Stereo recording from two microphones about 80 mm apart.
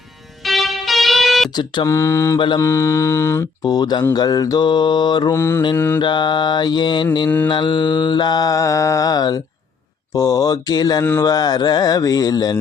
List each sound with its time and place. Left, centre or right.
0.4 s music: centre
1.5 s speech: left
1.9 s mantra: left
3.6 s mantra: left
4.6 s mantra: left
5.3 s mantra: left
6.0 s mantra: left
7.3 s mantra: left
7.5 s mantra: left
10.1 s speech: left